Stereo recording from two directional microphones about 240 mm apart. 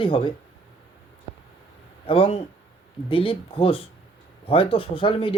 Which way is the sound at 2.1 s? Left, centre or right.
Left.